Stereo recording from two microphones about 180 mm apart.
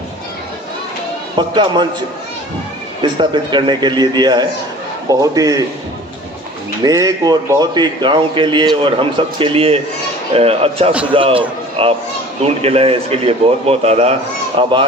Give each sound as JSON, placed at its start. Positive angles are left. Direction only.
{"t": 1.4, "sound": "a man's voice", "side_deg": -25}
{"t": 3.0, "sound": "a man's voice", "side_deg": -25}
{"t": 6.8, "sound": "a man's voice", "side_deg": -20}